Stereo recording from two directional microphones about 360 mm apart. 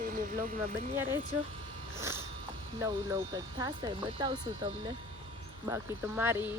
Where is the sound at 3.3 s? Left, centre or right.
Centre.